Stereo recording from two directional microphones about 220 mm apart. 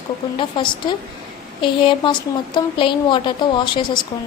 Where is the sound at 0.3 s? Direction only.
20° left (ahead or behind).